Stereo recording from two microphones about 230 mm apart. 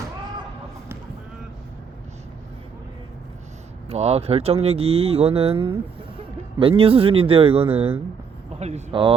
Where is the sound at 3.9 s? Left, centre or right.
Right.